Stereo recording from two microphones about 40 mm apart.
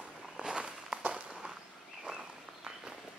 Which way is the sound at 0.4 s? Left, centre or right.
Right.